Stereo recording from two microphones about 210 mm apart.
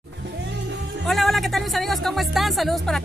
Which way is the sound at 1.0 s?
Centre (ahead or behind).